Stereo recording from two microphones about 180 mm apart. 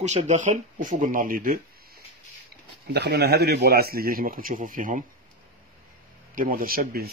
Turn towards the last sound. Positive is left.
turn(degrees=-55)  # may be behind; listen again after turning